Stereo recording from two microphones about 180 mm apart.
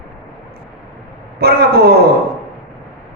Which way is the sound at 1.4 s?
60° right (ahead or behind).